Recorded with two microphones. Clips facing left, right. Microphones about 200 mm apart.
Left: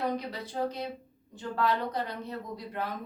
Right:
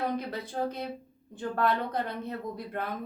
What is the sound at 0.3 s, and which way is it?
A woman's voice, 50° right (ahead or behind).